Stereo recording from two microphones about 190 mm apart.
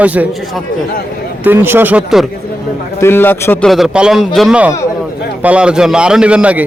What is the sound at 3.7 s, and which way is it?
A man's voice, 5° right (ahead or behind).